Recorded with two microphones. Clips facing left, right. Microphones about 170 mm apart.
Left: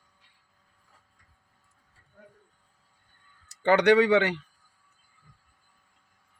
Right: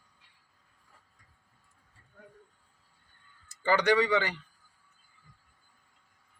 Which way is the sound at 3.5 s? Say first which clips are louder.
Left 6 dB; 70° left (ahead or behind).